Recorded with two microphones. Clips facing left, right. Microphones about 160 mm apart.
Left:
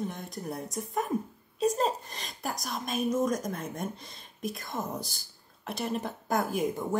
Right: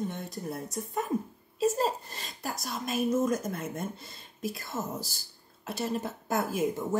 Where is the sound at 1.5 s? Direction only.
5° right (ahead or behind).